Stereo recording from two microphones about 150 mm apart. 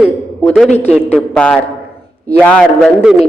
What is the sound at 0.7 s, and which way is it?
Speech, 45° left (ahead or behind).